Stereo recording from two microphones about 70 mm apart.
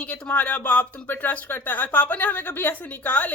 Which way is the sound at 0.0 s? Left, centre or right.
Left.